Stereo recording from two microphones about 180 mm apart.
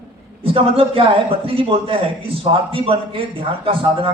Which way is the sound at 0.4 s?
30° right (ahead or behind).